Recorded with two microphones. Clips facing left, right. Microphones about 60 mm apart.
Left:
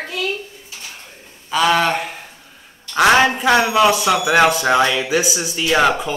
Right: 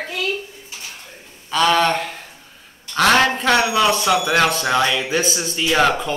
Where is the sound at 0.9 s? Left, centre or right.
Centre.